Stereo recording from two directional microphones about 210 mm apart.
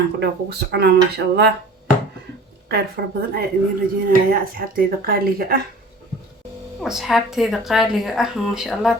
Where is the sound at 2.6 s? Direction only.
50° right (ahead or behind).